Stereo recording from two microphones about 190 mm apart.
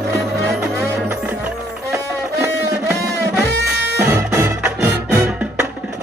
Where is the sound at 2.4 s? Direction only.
15° right (ahead or behind).